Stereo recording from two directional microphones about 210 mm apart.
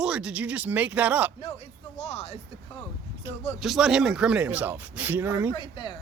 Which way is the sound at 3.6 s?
Centre (ahead or behind).